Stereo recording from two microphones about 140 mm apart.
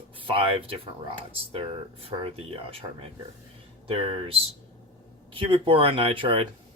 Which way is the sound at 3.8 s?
40° right (ahead or behind).